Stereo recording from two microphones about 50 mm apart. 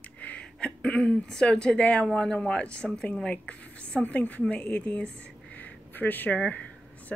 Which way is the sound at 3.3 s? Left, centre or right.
Left.